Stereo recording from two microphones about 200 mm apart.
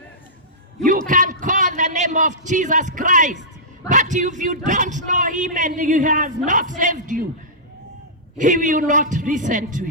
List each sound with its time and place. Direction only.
0.9 s a man's voice: 40° right (ahead or behind)
8.4 s a man's voice: 40° right (ahead or behind)